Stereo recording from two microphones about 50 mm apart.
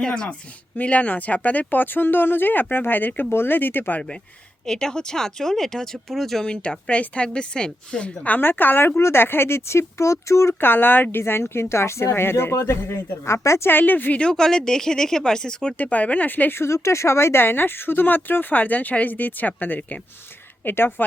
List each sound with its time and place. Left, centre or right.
0.0 s a woman's voice: left
4.6 s speech: centre
6.4 s a woman's voice: centre
8.4 s speech: left
9.0 s a woman's voice: left
10.6 s a woman's voice: left
13.7 s speech: left
14.2 s speech: centre
15.8 s speech: left
16.6 s speech: left
20.7 s speech: left